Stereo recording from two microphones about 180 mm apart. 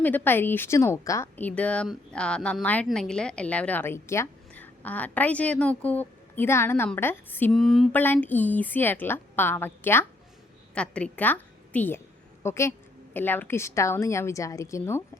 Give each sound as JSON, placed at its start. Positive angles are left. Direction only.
{"t": 0.0, "sound": "a woman's voice", "side_deg": 10}